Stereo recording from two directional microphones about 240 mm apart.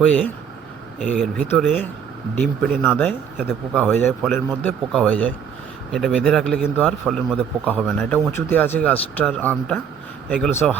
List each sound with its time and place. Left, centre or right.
0.0 s speech: centre
7.9 s speech: centre